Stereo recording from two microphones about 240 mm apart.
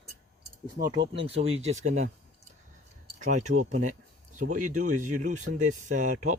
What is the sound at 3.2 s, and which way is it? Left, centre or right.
Speech, right.